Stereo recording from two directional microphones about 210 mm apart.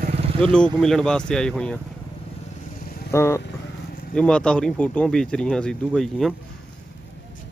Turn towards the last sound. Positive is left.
turn(degrees=0)  # may be behind; listen again after turning